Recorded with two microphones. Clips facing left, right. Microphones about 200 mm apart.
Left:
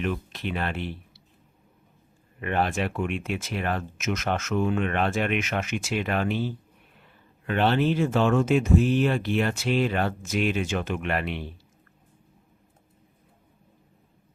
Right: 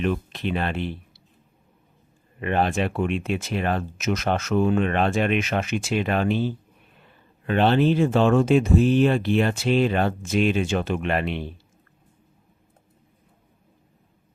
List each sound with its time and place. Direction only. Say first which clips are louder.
0.0 s speech: right 4 dB; 30° right (ahead or behind)
2.4 s speech: right 3 dB; 25° right (ahead or behind)